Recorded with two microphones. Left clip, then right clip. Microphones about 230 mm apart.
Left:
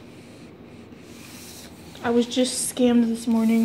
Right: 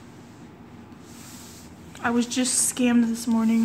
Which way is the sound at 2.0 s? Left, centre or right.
Centre.